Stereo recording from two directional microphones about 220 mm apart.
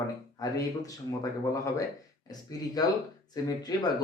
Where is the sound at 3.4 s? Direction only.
15° left (ahead or behind).